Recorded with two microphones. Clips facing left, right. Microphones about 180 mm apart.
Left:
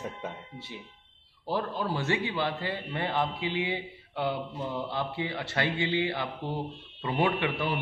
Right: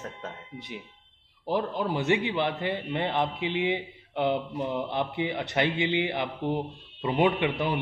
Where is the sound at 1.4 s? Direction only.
15° right (ahead or behind).